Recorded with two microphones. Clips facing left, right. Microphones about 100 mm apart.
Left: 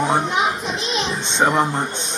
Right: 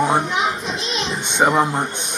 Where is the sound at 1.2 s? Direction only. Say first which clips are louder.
Right 2 dB; 5° right (ahead or behind).